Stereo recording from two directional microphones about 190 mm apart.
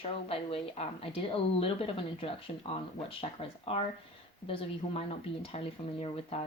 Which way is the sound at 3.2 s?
30° left (ahead or behind).